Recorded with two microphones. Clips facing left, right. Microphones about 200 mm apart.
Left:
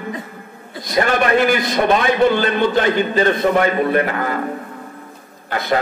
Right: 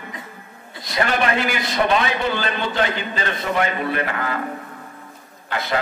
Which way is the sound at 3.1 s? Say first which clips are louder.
Left 8 dB; 45° left (ahead or behind).